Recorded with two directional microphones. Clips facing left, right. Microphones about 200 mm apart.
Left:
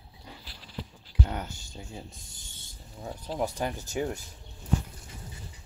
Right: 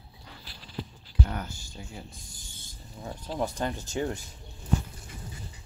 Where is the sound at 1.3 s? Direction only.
20° left (ahead or behind).